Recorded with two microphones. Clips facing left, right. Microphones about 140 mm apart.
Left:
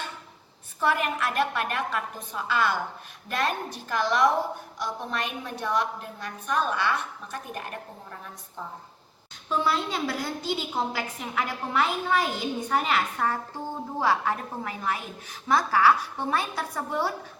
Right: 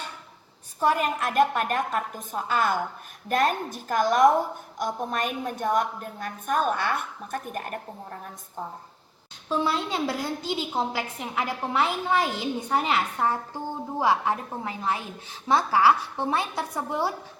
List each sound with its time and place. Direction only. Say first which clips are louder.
0.8 s a woman's voice: right 2 dB; 40° right (ahead or behind)
9.5 s a woman's voice: even; 25° right (ahead or behind)